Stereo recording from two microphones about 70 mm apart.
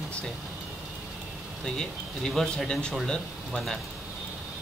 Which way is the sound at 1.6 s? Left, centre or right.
Centre.